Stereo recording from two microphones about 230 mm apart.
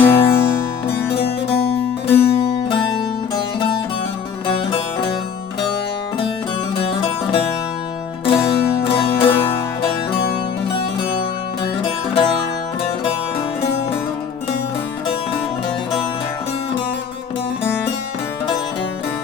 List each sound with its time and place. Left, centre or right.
0.0 s music: centre
1.8 s music: centre
2.2 s music: left
4.4 s music: left
6.7 s music: left
11.8 s music: left